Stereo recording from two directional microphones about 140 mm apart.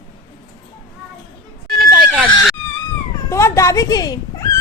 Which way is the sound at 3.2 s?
20° left (ahead or behind).